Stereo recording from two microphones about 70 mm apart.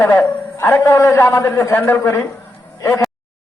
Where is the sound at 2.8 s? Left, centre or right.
Left.